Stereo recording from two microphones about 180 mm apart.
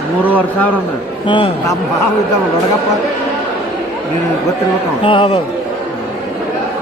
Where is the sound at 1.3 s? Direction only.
25° left (ahead or behind).